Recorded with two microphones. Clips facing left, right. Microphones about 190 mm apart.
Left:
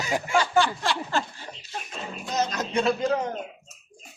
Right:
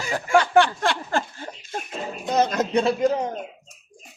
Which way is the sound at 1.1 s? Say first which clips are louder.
Right 3 dB; 50° right (ahead or behind).